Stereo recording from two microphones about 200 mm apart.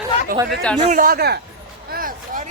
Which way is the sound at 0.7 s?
35° right (ahead or behind).